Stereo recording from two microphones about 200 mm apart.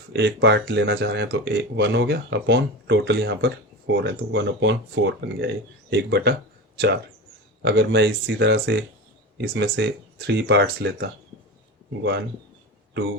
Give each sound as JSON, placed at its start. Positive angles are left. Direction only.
{"t": 0.1, "sound": "speech", "side_deg": -60}